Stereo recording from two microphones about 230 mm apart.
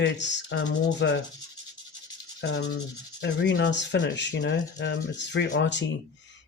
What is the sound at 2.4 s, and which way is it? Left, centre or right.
Rub, left.